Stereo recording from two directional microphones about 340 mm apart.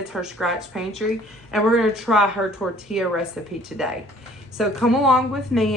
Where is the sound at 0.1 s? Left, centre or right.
Centre.